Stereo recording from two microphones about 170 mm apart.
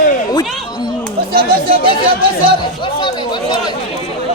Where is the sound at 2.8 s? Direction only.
30° left (ahead or behind).